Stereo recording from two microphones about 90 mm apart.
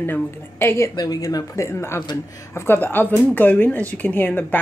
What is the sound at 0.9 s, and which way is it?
Speech, 45° left (ahead or behind).